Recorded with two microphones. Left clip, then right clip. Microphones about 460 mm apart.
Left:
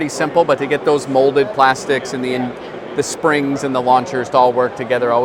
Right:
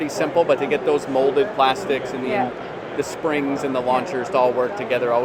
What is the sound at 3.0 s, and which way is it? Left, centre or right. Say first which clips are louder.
Speech: left 7 dB; left.